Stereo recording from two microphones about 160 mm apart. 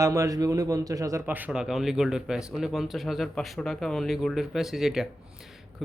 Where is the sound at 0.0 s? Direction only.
20° right (ahead or behind).